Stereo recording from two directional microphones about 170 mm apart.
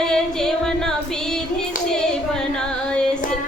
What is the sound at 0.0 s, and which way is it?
Female singing, 5° left (ahead or behind).